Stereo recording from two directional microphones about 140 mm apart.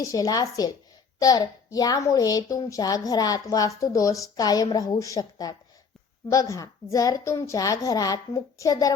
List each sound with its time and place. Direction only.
0.0 s a child's voice: 25° left (ahead or behind)